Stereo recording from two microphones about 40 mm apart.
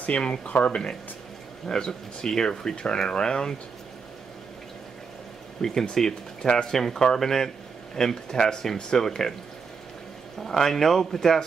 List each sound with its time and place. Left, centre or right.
0.0 s speech: left
1.7 s speech: centre
5.6 s speech: centre
10.4 s speech: centre